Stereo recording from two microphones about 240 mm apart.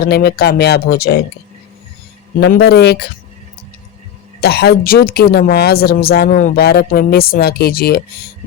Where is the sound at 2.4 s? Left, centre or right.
Left.